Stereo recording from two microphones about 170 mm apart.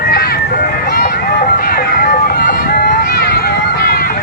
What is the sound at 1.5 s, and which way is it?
Music, 60° left (ahead or behind).